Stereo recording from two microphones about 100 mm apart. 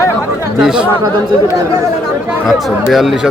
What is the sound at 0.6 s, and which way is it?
Speech, 5° right (ahead or behind).